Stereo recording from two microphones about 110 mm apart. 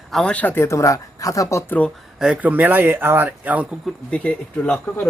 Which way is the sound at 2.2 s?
10° right (ahead or behind).